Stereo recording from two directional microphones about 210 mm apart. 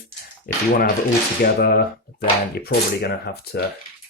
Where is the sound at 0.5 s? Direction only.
45° left (ahead or behind).